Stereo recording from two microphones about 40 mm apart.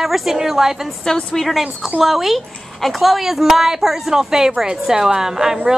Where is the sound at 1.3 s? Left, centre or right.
Centre.